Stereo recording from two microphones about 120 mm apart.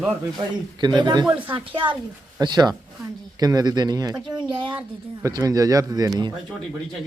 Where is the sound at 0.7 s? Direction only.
40° right (ahead or behind).